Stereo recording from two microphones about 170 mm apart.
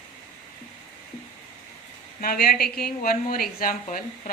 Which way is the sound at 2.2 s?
60° left (ahead or behind).